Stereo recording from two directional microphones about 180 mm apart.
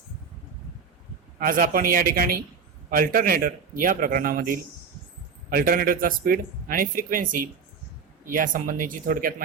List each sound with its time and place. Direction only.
1.4 s speech: 50° right (ahead or behind)